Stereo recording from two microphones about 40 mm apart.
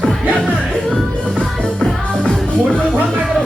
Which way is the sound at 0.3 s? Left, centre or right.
Left.